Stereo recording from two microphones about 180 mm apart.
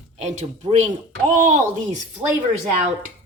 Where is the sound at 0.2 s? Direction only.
40° right (ahead or behind).